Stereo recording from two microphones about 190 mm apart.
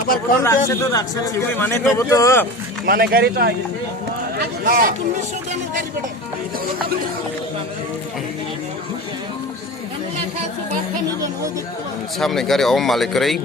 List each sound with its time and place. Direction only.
0.4 s speech: 15° left (ahead or behind)
2.8 s a man's voice: 50° right (ahead or behind)
12.2 s speech: centre (ahead or behind)